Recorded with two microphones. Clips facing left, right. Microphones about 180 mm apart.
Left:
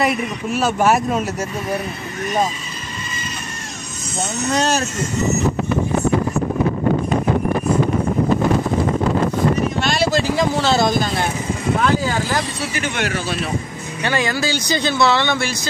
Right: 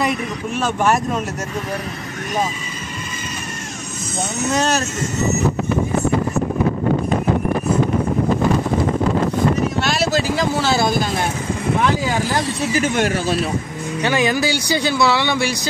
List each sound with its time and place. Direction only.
0.0 s a man's voice: 5° left (ahead or behind)
4.5 s speech: centre (ahead or behind)
9.8 s speech: 5° right (ahead or behind)
12.7 s speech: 40° right (ahead or behind)
14.0 s speech: 15° right (ahead or behind)